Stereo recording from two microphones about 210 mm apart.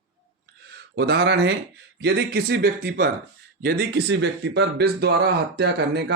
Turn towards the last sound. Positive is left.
turn(degrees=-50)  # may be behind; listen again after turning